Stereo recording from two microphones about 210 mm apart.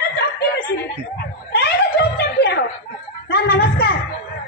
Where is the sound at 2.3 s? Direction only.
50° left (ahead or behind).